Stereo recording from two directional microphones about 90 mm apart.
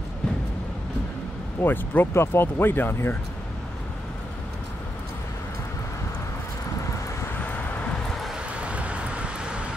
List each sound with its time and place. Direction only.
1.6 s speech: 25° left (ahead or behind)
8.5 s vehicle: 15° right (ahead or behind)